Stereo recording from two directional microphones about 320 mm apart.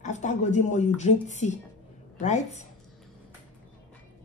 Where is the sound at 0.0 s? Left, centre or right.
Left.